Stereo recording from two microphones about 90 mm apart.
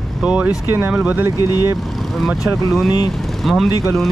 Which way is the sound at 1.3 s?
40° left (ahead or behind).